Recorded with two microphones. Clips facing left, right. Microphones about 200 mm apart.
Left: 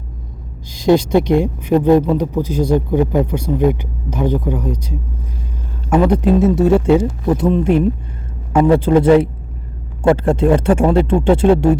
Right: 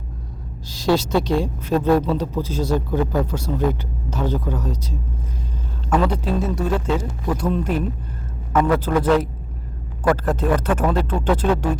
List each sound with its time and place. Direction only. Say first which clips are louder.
0.8 s speech: left 6 dB; 15° left (ahead or behind)
5.9 s speech: left 7 dB; 20° left (ahead or behind)